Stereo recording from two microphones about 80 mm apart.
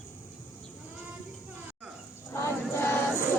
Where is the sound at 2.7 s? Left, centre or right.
Left.